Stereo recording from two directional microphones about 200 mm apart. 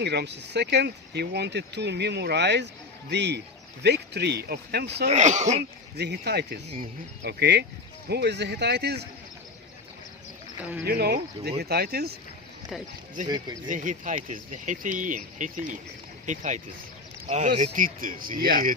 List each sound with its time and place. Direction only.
0.0 s speech: 55° right (ahead or behind)
5.1 s speech: 35° right (ahead or behind)
5.5 s speech: 55° right (ahead or behind)
10.8 s speech: 50° right (ahead or behind)
13.7 s speech: 40° right (ahead or behind)